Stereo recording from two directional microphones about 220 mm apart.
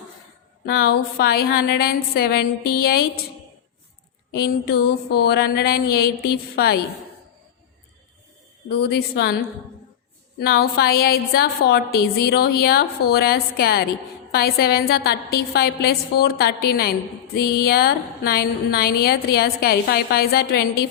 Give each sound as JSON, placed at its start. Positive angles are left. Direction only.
{"t": 0.6, "sound": "a woman's voice", "side_deg": 45}
{"t": 4.3, "sound": "a woman's voice", "side_deg": 45}
{"t": 8.8, "sound": "a woman's voice", "side_deg": 50}
{"t": 10.4, "sound": "a woman's voice", "side_deg": 45}